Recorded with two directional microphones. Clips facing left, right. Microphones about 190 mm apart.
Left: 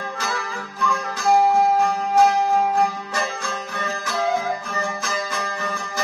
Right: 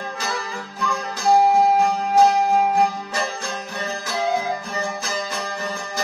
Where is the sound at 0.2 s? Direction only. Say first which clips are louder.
Even; centre (ahead or behind).